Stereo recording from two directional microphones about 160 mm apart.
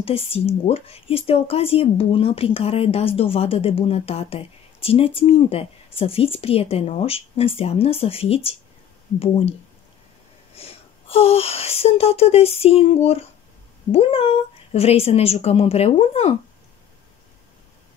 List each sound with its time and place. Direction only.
0.0 s speech: 35° left (ahead or behind)